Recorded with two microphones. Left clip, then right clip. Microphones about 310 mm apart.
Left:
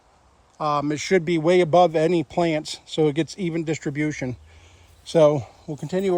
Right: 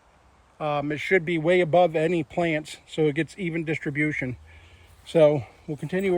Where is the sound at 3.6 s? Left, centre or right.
Left.